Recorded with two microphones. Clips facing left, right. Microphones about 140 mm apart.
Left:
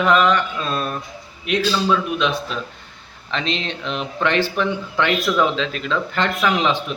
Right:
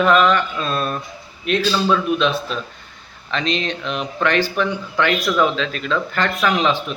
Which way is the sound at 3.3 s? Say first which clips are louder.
Right 2 dB; 25° left (ahead or behind).